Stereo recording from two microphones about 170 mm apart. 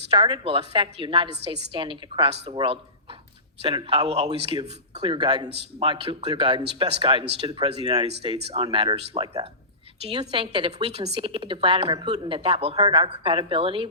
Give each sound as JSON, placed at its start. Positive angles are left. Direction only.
{"t": 0.1, "sound": "a woman's voice", "side_deg": -30}